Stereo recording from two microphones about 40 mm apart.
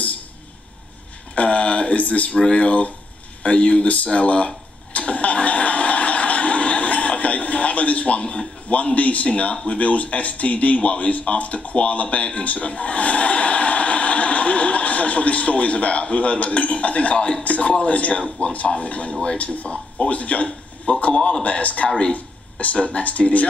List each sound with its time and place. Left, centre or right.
1.3 s speech: left
4.9 s vehicle: left
17.8 s speech: left
20.4 s a sound: left
21.0 s a man's voice: left